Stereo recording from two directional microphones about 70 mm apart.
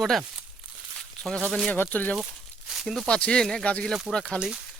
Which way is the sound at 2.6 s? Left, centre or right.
Centre.